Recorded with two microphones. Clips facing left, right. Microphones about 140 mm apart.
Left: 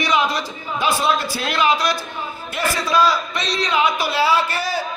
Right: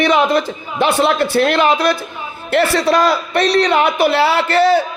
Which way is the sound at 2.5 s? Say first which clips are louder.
Right 8 dB; 70° right (ahead or behind).